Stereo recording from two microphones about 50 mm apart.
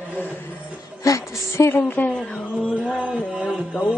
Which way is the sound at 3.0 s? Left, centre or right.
Right.